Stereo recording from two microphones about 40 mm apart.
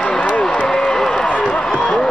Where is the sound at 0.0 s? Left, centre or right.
Centre.